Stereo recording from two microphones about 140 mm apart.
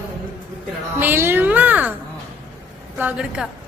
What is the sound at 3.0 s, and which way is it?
Speech, 5° right (ahead or behind).